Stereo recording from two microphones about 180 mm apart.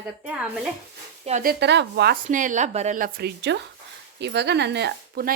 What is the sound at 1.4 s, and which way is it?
Speech, 70° right (ahead or behind).